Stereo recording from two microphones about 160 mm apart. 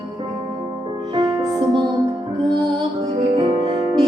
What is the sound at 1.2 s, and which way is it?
Music, 25° right (ahead or behind).